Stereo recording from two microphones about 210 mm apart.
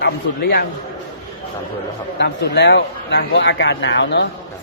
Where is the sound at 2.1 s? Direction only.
50° left (ahead or behind).